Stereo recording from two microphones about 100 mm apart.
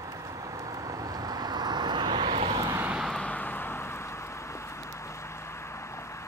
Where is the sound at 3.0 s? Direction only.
5° left (ahead or behind).